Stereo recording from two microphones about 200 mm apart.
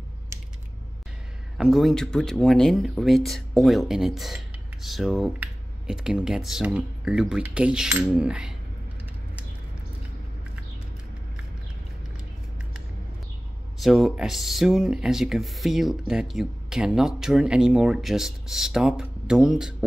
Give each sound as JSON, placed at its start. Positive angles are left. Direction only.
{"t": 0.3, "sound": "typing", "side_deg": -15}
{"t": 1.6, "sound": "speech", "side_deg": 0}
{"t": 13.7, "sound": "speech", "side_deg": 0}